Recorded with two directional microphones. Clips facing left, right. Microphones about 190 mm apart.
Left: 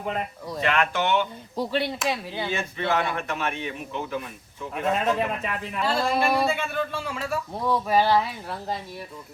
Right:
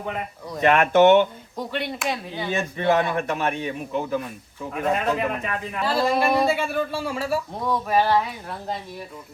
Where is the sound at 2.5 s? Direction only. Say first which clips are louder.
Right 6 dB; 45° right (ahead or behind).